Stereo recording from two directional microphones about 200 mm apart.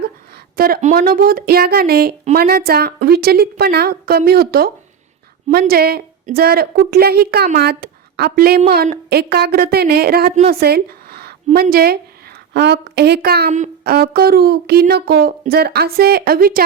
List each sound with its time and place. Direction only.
0.5 s a woman's voice: 45° right (ahead or behind)
10.5 s a sound: 50° right (ahead or behind)
11.5 s a woman's voice: 50° right (ahead or behind)
13.5 s speech: 35° right (ahead or behind)
13.9 s a woman's voice: 50° right (ahead or behind)